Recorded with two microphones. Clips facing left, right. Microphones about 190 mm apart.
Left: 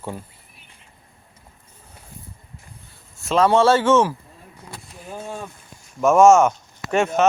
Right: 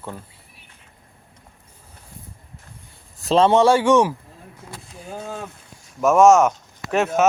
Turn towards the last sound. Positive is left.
turn(degrees=0)  # may be behind; listen again after turning